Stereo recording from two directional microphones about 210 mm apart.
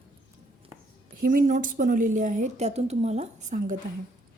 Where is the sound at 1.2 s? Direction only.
40° right (ahead or behind).